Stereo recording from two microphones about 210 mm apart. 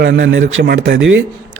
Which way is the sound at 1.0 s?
65° right (ahead or behind).